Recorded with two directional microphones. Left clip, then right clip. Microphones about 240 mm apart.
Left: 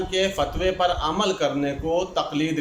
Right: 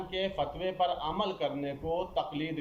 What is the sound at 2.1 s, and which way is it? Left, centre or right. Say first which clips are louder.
Speech: left 9 dB; left.